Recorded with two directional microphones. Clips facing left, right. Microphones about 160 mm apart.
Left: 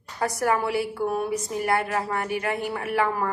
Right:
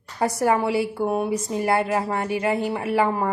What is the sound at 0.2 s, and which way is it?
A woman's voice, 25° right (ahead or behind).